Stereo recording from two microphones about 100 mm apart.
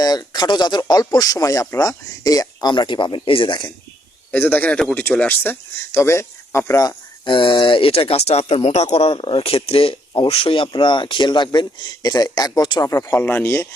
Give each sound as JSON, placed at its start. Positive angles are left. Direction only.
{"t": 0.0, "sound": "speech", "side_deg": 40}
{"t": 4.3, "sound": "speech", "side_deg": 20}
{"t": 7.3, "sound": "speech", "side_deg": 55}
{"t": 12.8, "sound": "speech", "side_deg": 30}